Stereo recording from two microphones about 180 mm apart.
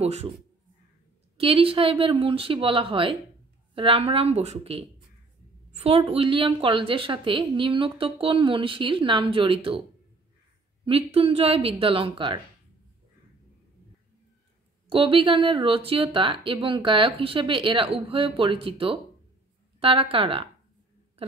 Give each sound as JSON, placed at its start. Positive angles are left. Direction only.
{"t": 0.0, "sound": "speech", "side_deg": -35}
{"t": 1.4, "sound": "a woman's voice", "side_deg": -30}
{"t": 10.9, "sound": "speech", "side_deg": -30}
{"t": 14.9, "sound": "a woman's voice", "side_deg": -30}